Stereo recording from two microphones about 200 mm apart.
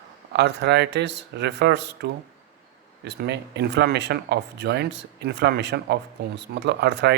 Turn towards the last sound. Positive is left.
turn(degrees=-60)  # may be behind; listen again after turning